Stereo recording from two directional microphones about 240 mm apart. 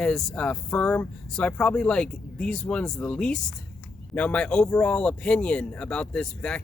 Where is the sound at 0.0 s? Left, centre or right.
Centre.